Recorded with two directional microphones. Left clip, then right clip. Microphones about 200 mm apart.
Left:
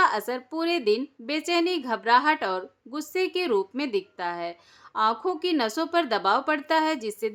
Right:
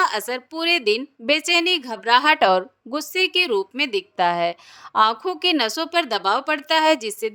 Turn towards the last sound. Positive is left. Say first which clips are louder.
# right 8 dB
turn(degrees=-40)  # may be behind; listen again after turning